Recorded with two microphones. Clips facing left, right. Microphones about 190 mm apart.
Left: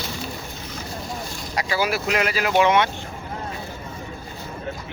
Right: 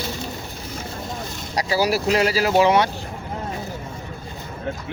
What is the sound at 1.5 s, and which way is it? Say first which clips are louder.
Speech: right 3 dB; 35° right (ahead or behind).